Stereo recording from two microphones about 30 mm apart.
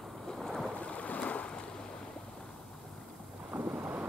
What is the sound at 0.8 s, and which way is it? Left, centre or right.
Boat, left.